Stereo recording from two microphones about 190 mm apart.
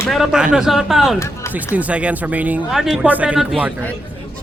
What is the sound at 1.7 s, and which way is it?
Speech, 5° right (ahead or behind).